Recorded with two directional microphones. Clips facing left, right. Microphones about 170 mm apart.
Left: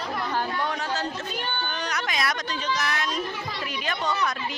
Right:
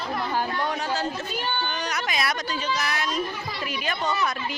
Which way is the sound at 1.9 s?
10° right (ahead or behind).